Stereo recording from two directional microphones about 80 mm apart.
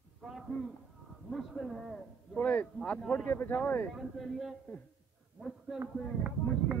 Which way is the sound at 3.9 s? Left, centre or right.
Centre.